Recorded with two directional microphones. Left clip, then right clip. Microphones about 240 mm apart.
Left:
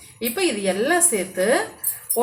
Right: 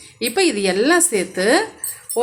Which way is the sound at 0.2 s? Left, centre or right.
Right.